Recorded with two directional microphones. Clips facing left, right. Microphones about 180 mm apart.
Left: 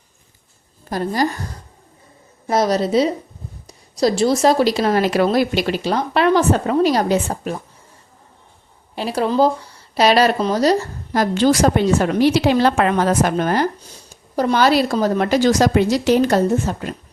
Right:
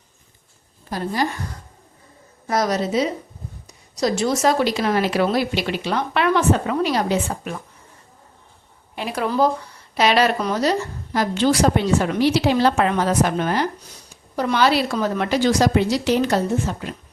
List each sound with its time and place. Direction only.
0.9 s a woman's voice: 40° left (ahead or behind)
2.5 s speech: 30° left (ahead or behind)
9.0 s a woman's voice: 30° left (ahead or behind)